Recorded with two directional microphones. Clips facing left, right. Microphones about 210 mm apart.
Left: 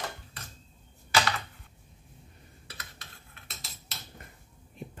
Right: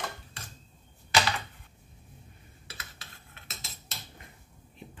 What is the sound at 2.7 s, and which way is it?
Cutlery, 5° right (ahead or behind).